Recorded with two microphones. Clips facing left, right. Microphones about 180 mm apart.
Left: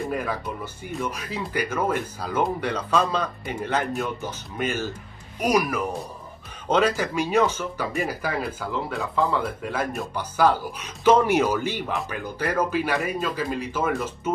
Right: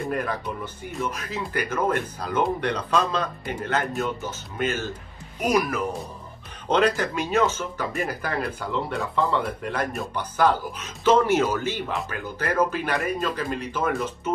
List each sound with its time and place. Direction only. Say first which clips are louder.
0.0 s speech: even; 5° left (ahead or behind)